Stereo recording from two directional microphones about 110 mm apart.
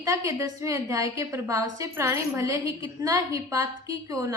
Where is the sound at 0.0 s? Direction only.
30° right (ahead or behind).